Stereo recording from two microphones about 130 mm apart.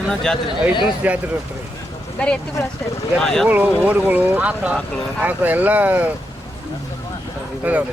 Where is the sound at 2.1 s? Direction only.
5° left (ahead or behind).